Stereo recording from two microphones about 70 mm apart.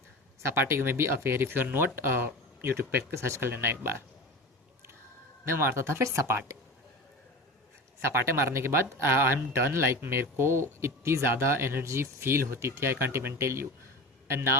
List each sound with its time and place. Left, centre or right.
0.4 s speech: right
5.5 s speech: right
8.2 s a man's voice: right